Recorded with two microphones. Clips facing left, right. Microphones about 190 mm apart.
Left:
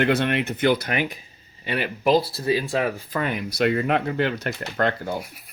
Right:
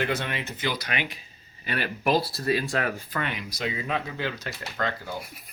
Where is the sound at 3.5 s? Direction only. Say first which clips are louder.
Left 11 dB; 65° left (ahead or behind).